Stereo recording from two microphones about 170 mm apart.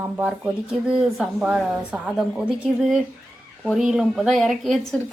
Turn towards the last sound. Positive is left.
turn(degrees=0)  # may be behind; listen again after turning